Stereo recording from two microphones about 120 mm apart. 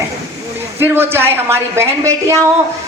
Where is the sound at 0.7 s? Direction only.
15° right (ahead or behind).